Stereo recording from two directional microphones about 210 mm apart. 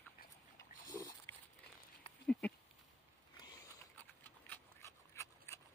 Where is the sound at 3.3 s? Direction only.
20° left (ahead or behind).